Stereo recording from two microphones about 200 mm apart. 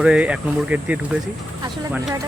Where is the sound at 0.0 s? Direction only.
5° right (ahead or behind).